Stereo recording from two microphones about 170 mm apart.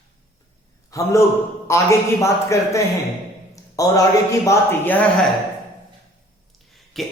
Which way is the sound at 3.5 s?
20° left (ahead or behind).